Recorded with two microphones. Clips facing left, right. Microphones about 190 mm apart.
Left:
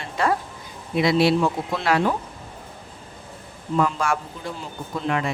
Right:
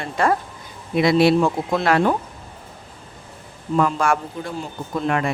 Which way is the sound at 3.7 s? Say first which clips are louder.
Right 3 dB; 50° right (ahead or behind).